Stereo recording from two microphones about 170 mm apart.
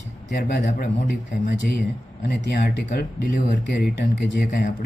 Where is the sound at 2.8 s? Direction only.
50° left (ahead or behind).